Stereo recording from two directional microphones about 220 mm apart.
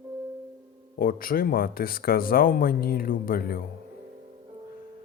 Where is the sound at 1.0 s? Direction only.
40° left (ahead or behind).